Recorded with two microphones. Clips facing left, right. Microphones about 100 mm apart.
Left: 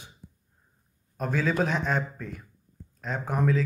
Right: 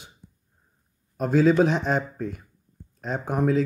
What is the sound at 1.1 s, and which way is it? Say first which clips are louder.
A man's voice: right 8 dB; 25° right (ahead or behind).